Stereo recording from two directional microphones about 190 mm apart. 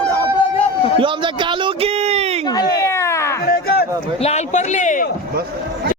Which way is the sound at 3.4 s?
55° left (ahead or behind).